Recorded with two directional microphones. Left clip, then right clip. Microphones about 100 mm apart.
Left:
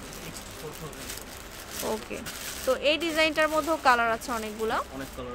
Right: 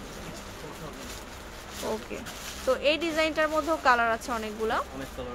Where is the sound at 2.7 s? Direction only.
10° left (ahead or behind); by 3.7 s 25° left (ahead or behind).